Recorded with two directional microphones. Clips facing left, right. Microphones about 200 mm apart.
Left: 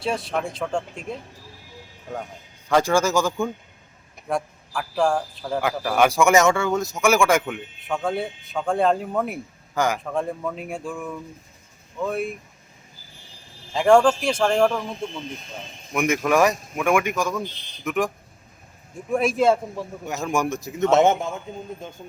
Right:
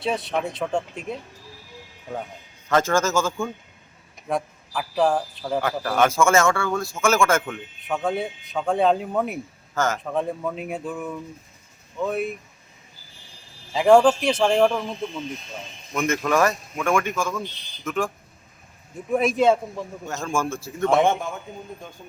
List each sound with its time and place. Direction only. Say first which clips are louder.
0.0 s speech: even; centre (ahead or behind)
2.6 s speech: left 1 dB; 15° left (ahead or behind)
4.3 s speech: even; centre (ahead or behind)
5.6 s speech: left 2 dB; 10° left (ahead or behind)
7.4 s speech: left 1 dB; centre (ahead or behind)
9.7 s speech: left 1 dB; 15° left (ahead or behind)
10.0 s speech: right 1 dB; centre (ahead or behind)
13.7 s speech: right 1 dB; 5° right (ahead or behind)
15.9 s speech: left 2 dB; 15° left (ahead or behind)
19.1 s speech: even; centre (ahead or behind)
19.7 s a man's voice: left 1 dB; 15° left (ahead or behind)